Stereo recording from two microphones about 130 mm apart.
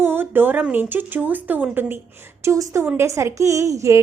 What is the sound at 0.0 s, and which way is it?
A woman's voice, 15° right (ahead or behind).